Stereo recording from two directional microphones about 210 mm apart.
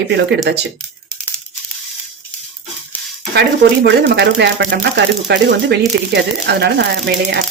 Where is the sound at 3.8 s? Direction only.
55° right (ahead or behind).